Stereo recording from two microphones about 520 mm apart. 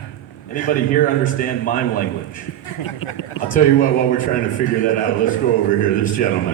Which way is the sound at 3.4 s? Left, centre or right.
Centre.